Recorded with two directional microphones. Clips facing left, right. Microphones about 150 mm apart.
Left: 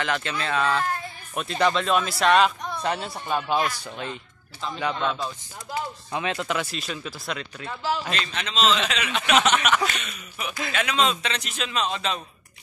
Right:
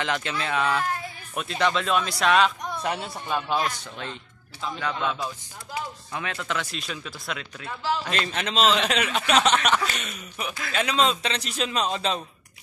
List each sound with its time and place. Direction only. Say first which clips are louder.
0.0 s speech: left 1 dB; 15° right (ahead or behind)
1.3 s speech: left 2 dB; centre (ahead or behind)
3.3 s speech: left 2 dB; 5° left (ahead or behind)
4.9 s speech: left 1 dB; 10° right (ahead or behind)
6.1 s speech: left 4 dB; 20° left (ahead or behind)
6.7 s speech: left 2 dB; centre (ahead or behind)
8.2 s a man's voice: right 1 dB; 50° right (ahead or behind)
9.0 s a man's voice: left 3 dB; 35° right (ahead or behind)